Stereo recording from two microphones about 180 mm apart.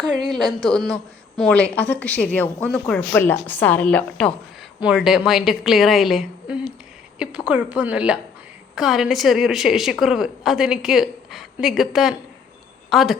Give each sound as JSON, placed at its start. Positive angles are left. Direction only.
{"t": 0.1, "sound": "a woman's voice", "side_deg": 0}